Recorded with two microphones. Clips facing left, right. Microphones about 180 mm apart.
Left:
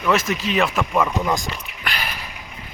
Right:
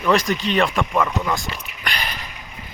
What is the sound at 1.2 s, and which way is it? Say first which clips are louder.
Speech: left 2 dB; 15° left (ahead or behind).